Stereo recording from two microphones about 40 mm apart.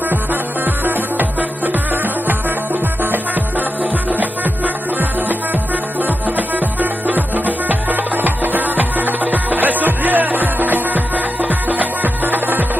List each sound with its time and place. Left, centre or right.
3.0 s music: right
6.0 s music: right